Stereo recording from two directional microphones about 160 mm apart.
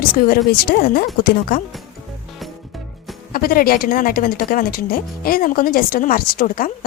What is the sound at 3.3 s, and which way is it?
Speech, 65° left (ahead or behind).